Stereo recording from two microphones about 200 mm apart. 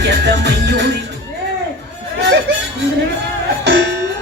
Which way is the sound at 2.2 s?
55° right (ahead or behind).